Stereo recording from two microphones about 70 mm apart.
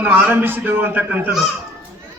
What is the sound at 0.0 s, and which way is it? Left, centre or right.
A man's voice, right.